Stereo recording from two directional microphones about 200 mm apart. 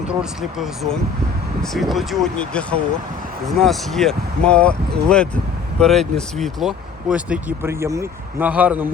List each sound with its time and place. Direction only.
0.1 s speech: 5° right (ahead or behind)